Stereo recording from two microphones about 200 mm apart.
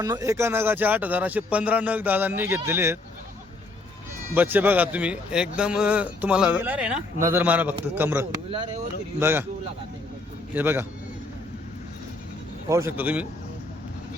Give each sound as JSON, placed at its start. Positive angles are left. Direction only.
{"t": 0.0, "sound": "a man's voice", "side_deg": -15}
{"t": 4.4, "sound": "a man's voice", "side_deg": -10}
{"t": 8.4, "sound": "speech", "side_deg": -25}
{"t": 9.1, "sound": "a man's voice", "side_deg": -10}
{"t": 10.5, "sound": "a man's voice", "side_deg": -10}
{"t": 12.6, "sound": "a man's voice", "side_deg": -15}